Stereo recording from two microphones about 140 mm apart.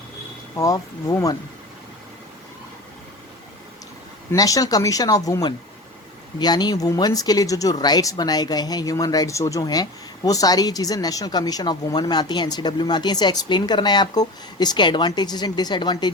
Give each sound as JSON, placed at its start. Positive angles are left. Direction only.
{"t": 0.5, "sound": "speech", "side_deg": 25}
{"t": 4.3, "sound": "a woman's voice", "side_deg": 25}